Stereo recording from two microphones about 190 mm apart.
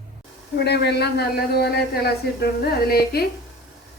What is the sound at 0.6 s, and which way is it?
Speech, 60° left (ahead or behind).